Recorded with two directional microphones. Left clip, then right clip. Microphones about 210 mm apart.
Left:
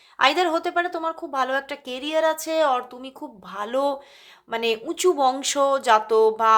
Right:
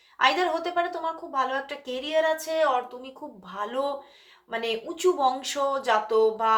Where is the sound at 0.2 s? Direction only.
45° left (ahead or behind).